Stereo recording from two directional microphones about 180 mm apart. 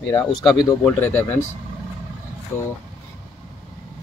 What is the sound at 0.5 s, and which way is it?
Speech, 20° left (ahead or behind).